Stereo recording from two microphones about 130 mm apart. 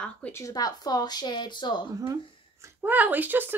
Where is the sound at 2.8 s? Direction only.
15° right (ahead or behind).